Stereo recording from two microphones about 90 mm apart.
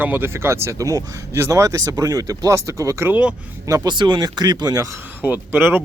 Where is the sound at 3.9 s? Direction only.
60° right (ahead or behind).